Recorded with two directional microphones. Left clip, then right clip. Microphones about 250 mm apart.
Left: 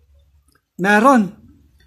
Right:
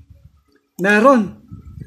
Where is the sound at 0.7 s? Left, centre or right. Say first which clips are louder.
Right 1 dB; centre.